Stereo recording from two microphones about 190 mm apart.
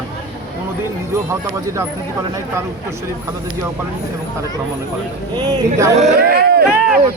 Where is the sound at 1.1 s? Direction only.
15° right (ahead or behind).